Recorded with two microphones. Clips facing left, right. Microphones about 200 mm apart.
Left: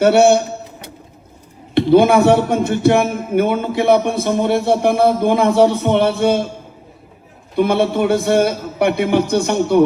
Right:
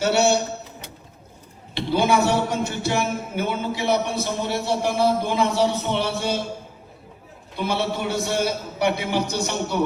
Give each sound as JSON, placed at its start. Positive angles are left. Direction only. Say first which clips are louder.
{"t": 0.0, "sound": "speech", "louder": "left 8 dB", "side_deg": 55}
{"t": 1.7, "sound": "speech", "louder": "left 10 dB", "side_deg": 55}
{"t": 7.5, "sound": "speech", "louder": "left 10 dB", "side_deg": 55}